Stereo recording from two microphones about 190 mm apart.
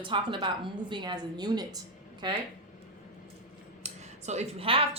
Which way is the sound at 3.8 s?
35° right (ahead or behind).